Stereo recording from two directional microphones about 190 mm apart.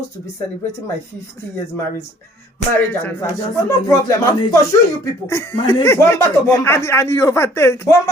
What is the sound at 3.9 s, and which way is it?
Speech, 15° left (ahead or behind).